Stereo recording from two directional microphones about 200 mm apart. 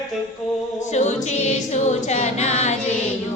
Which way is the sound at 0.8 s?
35° left (ahead or behind).